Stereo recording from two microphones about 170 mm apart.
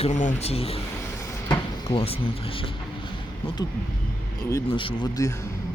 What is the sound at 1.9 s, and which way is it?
Speech, 30° left (ahead or behind).